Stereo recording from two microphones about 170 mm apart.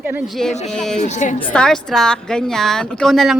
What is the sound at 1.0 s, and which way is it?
Speech, 45° left (ahead or behind).